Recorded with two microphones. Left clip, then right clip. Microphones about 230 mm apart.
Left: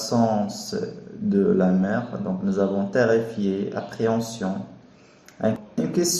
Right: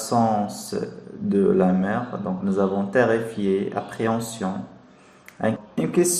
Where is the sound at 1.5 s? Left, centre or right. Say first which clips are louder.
Right 1 dB; right.